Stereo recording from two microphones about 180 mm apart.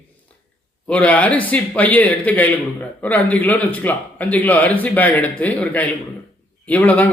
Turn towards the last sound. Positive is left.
turn(degrees=10)  # may be behind; listen again after turning